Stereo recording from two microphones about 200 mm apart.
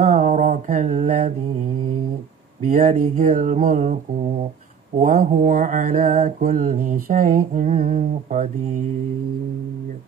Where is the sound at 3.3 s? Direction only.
40° right (ahead or behind).